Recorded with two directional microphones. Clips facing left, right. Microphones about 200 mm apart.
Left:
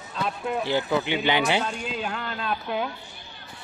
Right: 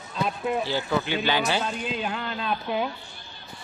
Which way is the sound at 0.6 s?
20° left (ahead or behind).